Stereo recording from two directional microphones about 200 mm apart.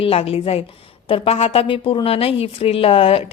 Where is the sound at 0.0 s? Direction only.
30° left (ahead or behind).